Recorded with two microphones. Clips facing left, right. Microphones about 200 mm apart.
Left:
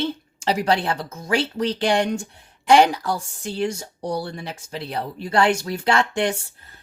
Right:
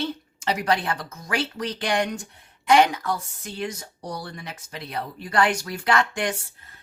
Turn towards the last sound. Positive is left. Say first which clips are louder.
# left 3 dB
turn(degrees=30)  # may be behind; listen again after turning